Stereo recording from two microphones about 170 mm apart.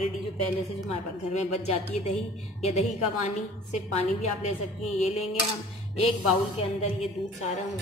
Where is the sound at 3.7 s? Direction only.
40° left (ahead or behind).